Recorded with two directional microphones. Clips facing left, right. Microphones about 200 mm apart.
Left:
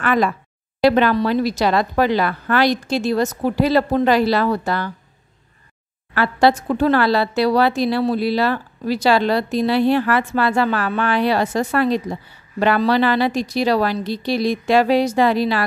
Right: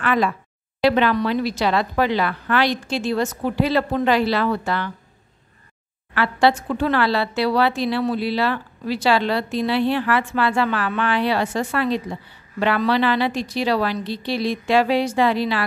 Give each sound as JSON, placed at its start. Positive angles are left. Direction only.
{"t": 0.0, "sound": "a woman's voice", "side_deg": 45}
{"t": 6.1, "sound": "a woman's voice", "side_deg": 40}